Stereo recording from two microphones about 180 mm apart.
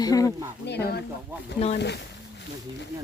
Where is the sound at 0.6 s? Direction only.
65° left (ahead or behind).